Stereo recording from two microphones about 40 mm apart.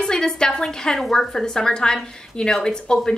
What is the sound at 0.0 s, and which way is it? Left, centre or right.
A woman's voice, centre.